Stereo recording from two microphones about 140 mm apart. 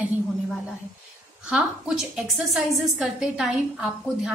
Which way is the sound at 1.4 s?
5° right (ahead or behind).